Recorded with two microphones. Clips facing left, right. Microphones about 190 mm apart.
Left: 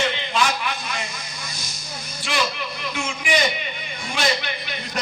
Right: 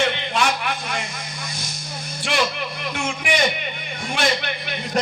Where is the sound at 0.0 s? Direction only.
60° right (ahead or behind).